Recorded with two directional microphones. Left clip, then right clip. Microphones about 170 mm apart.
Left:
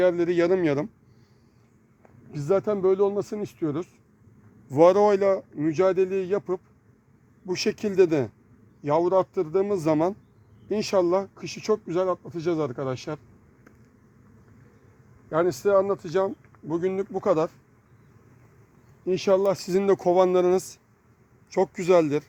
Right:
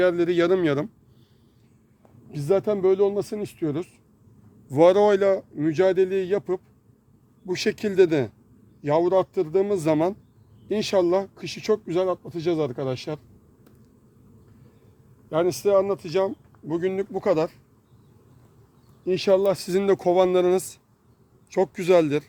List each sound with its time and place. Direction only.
0.0 s speech: 10° left (ahead or behind)
2.3 s speech: 20° left (ahead or behind)
15.3 s speech: 25° left (ahead or behind)
19.0 s speech: 15° left (ahead or behind)